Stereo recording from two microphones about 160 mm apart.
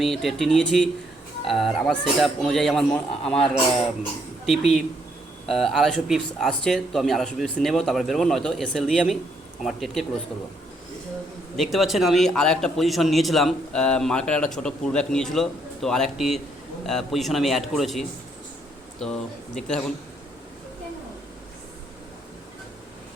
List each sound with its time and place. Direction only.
0.0 s speech: centre (ahead or behind)
11.5 s speech: centre (ahead or behind)